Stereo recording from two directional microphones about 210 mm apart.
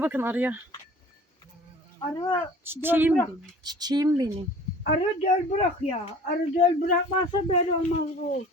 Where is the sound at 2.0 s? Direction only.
20° left (ahead or behind).